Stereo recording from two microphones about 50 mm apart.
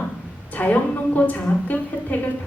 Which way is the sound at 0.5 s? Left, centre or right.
Left.